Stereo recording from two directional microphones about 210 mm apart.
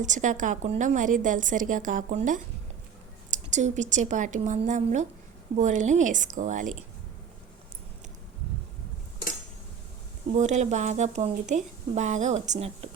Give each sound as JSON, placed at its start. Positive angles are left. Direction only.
{"t": 0.0, "sound": "a woman's voice", "side_deg": -35}
{"t": 10.3, "sound": "a woman's voice", "side_deg": -35}